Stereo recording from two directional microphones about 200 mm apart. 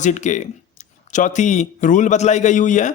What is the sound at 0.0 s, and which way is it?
A man's voice, 35° left (ahead or behind).